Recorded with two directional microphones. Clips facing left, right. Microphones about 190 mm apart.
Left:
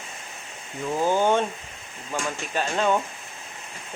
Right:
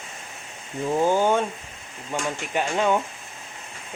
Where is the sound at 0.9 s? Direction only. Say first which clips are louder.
Right 1 dB; 20° right (ahead or behind).